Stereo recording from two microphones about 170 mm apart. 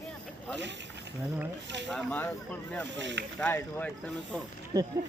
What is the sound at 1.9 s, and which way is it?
Speech, 5° left (ahead or behind).